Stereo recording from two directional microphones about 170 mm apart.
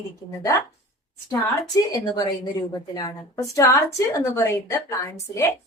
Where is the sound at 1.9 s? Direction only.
25° left (ahead or behind).